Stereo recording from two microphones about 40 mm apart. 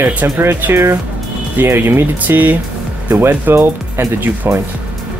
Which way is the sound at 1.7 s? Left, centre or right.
Right.